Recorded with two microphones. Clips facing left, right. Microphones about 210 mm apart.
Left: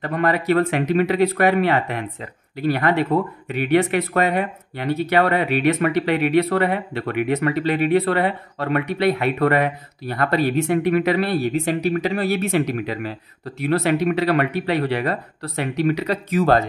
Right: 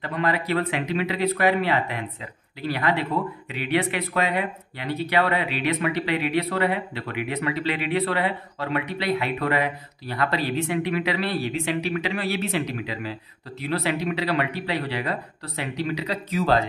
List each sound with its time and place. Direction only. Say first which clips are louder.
0.0 s speech: left 5 dB; 50° left (ahead or behind)